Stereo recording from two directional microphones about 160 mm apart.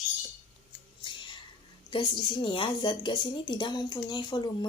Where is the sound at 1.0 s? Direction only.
30° left (ahead or behind).